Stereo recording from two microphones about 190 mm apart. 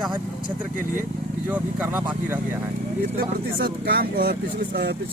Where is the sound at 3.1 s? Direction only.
50° right (ahead or behind).